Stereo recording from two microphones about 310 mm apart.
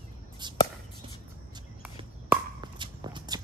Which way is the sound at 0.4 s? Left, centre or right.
Centre.